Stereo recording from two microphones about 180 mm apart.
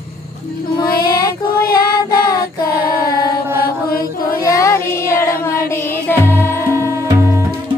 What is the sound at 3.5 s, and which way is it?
Mantra, 55° left (ahead or behind).